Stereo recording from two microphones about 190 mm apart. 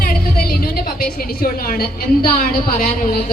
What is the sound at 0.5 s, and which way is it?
A woman's voice, 50° left (ahead or behind).